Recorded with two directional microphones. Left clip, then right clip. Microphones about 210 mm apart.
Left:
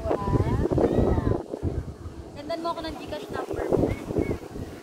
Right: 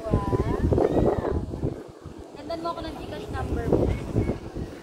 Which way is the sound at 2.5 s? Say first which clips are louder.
Left 1 dB; 10° right (ahead or behind).